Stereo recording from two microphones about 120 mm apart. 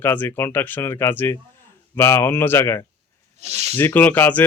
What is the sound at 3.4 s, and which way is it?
Speech, 65° right (ahead or behind).